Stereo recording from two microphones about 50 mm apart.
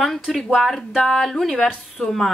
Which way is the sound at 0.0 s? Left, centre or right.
Centre.